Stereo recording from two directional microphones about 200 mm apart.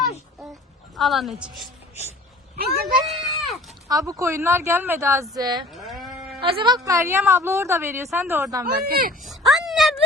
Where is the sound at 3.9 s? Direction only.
15° right (ahead or behind).